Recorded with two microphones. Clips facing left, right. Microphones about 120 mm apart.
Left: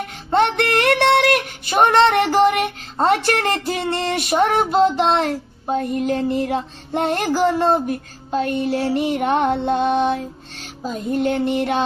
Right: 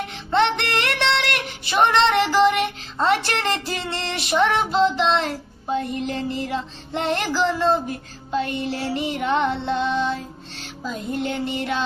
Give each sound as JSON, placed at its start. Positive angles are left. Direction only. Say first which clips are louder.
{"t": 0.3, "sound": "music", "louder": "left 3 dB", "side_deg": 50}